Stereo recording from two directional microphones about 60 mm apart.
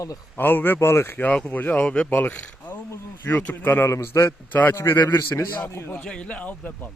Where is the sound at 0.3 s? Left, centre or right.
Left.